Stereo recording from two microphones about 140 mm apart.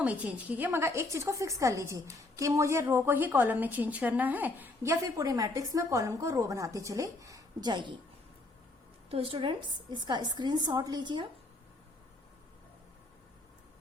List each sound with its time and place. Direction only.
0.0 s a woman's voice: 10° right (ahead or behind); by 7.9 s 35° right (ahead or behind)
9.0 s a woman's voice: 40° right (ahead or behind)